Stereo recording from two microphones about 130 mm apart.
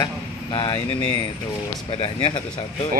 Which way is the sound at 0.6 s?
30° left (ahead or behind).